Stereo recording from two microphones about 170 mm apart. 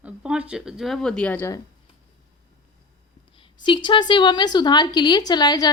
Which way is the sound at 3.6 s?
25° left (ahead or behind).